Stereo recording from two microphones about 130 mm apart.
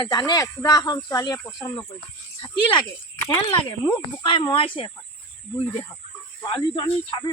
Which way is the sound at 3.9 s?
40° left (ahead or behind).